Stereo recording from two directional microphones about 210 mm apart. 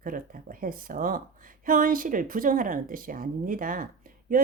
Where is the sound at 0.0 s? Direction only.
40° right (ahead or behind).